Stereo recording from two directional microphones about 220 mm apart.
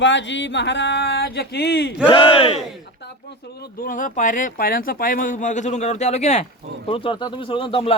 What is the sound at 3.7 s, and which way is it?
Speech, 40° left (ahead or behind).